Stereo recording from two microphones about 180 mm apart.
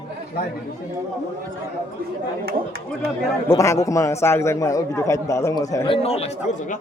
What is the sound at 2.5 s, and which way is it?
Speech, 55° right (ahead or behind).